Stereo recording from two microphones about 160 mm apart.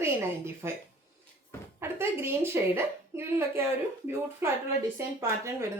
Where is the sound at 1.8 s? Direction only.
15° right (ahead or behind).